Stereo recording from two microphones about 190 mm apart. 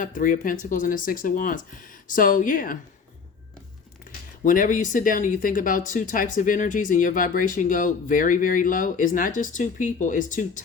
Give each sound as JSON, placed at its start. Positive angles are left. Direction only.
{"t": 0.0, "sound": "speech", "side_deg": 45}
{"t": 4.4, "sound": "speech", "side_deg": 45}